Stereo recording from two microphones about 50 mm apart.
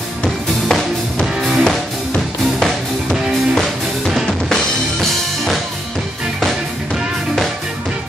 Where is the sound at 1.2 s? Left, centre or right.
Centre.